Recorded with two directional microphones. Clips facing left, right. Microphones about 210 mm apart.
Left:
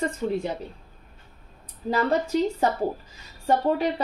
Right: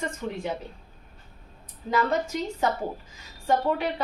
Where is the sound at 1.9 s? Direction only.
35° left (ahead or behind).